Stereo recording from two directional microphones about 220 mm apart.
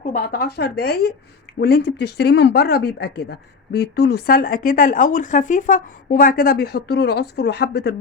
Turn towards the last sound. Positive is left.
turn(degrees=50)  # may be behind; listen again after turning